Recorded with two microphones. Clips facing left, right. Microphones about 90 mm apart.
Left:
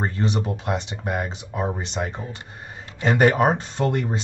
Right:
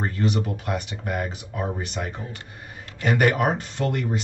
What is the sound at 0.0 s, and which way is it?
Speech, 25° left (ahead or behind).